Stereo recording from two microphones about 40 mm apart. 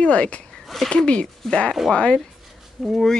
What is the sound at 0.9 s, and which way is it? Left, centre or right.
Speech, left.